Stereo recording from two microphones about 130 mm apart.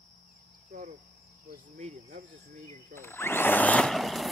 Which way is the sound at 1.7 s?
60° right (ahead or behind).